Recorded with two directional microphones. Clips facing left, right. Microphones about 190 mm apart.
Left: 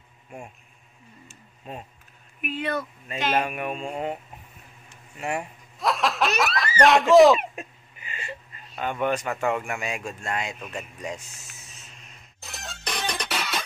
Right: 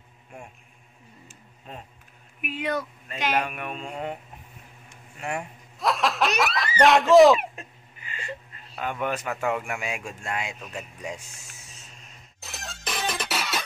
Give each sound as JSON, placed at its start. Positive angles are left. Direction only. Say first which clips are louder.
{"t": 2.4, "sound": "speech", "louder": "even", "side_deg": -10}
{"t": 3.4, "sound": "speech", "louder": "left 4 dB", "side_deg": 10}
{"t": 5.2, "sound": "speech", "louder": "left 2 dB", "side_deg": 5}
{"t": 7.5, "sound": "a sound", "louder": "left 5 dB", "side_deg": 15}
{"t": 9.0, "sound": "speech", "louder": "left 3 dB", "side_deg": -5}
{"t": 12.4, "sound": "music", "louder": "even", "side_deg": 0}